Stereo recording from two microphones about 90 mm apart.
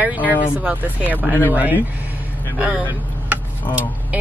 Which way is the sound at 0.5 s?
15° right (ahead or behind).